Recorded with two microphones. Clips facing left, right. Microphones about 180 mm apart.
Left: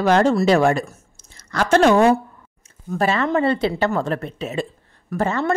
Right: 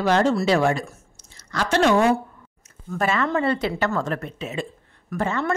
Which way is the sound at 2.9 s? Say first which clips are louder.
Left 3 dB; 35° left (ahead or behind).